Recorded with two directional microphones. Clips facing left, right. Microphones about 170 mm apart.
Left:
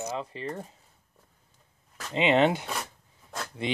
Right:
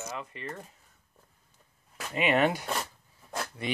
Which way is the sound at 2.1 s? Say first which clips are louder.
Left 3 dB; 25° left (ahead or behind).